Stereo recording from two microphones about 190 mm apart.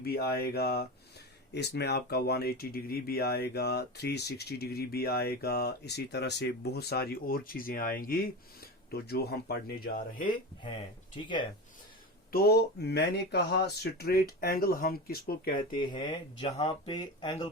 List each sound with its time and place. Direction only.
0.0 s speech: 55° left (ahead or behind)
11.1 s speech: 25° left (ahead or behind)
12.3 s speech: 55° left (ahead or behind)
15.7 s speech: 25° left (ahead or behind)